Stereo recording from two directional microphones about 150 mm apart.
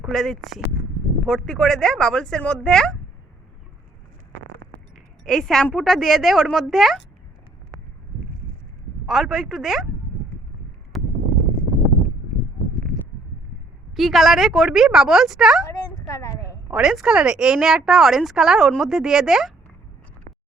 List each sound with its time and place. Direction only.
0.0 s speech: centre (ahead or behind)
5.3 s speech: centre (ahead or behind)
9.0 s speech: centre (ahead or behind)
10.9 s a sound: centre (ahead or behind)
13.9 s speech: centre (ahead or behind)
15.6 s a sound: 25° left (ahead or behind)
16.6 s speech: 5° right (ahead or behind)